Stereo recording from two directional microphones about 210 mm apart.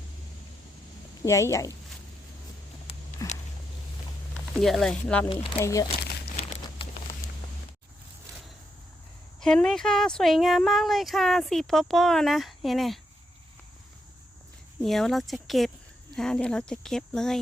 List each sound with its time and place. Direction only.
1.2 s speech: 15° left (ahead or behind)
3.2 s walk: 15° left (ahead or behind)
4.5 s speech: centre (ahead or behind)
5.3 s speech: 25° left (ahead or behind)
6.0 s crumpling: 50° left (ahead or behind)
6.4 s a sound: 30° left (ahead or behind)
9.4 s speech: centre (ahead or behind)
14.8 s speech: centre (ahead or behind)